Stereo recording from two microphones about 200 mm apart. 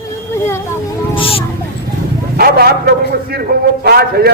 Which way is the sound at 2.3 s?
50° right (ahead or behind).